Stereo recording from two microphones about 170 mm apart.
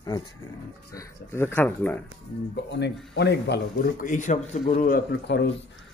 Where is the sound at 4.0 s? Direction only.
50° left (ahead or behind).